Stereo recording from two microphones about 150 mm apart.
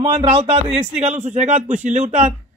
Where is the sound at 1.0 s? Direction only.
50° right (ahead or behind).